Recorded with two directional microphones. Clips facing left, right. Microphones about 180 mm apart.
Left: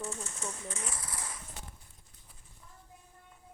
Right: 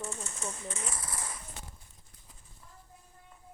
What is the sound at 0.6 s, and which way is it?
Speech, 25° right (ahead or behind).